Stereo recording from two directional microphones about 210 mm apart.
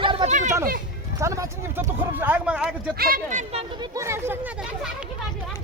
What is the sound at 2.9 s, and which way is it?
Speech, 45° right (ahead or behind).